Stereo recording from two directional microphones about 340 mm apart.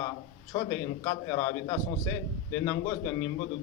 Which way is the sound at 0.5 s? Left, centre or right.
Centre.